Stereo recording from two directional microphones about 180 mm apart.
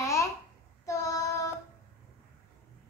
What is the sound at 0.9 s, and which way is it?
Child singing, 15° left (ahead or behind).